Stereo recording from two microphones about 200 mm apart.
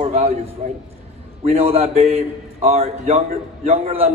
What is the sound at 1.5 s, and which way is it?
A man's voice, 30° right (ahead or behind).